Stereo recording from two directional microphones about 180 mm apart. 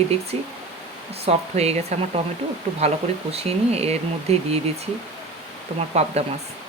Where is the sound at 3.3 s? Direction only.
35° right (ahead or behind).